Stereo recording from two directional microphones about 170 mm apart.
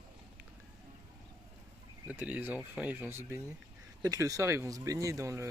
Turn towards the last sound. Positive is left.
turn(degrees=-20)  # may be behind; listen again after turning